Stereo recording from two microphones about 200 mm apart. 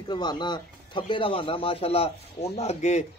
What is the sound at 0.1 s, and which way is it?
Speech, 20° left (ahead or behind).